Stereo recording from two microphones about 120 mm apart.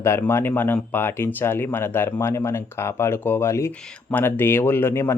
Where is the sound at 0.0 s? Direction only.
20° left (ahead or behind).